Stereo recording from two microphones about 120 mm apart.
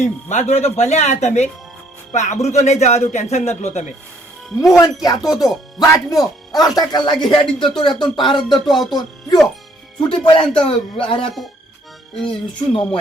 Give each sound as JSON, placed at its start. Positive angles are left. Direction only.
{"t": 0.0, "sound": "a man's voice", "side_deg": 75}
{"t": 4.8, "sound": "speech", "side_deg": 30}
{"t": 8.4, "sound": "speech", "side_deg": 0}
{"t": 8.9, "sound": "a man's voice", "side_deg": 35}
{"t": 12.3, "sound": "a man's voice", "side_deg": 45}